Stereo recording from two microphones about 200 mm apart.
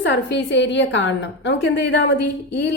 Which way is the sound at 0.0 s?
60° left (ahead or behind).